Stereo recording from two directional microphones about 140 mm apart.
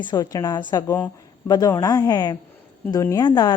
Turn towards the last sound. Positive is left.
turn(degrees=30)  # may be behind; listen again after turning